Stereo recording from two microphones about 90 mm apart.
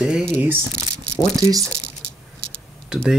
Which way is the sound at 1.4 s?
40° right (ahead or behind).